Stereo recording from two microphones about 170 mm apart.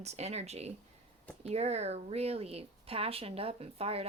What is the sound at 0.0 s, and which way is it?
A woman's voice, 40° right (ahead or behind).